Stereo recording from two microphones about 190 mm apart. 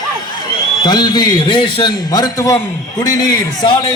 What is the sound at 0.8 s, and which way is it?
A man's voice, 20° left (ahead or behind).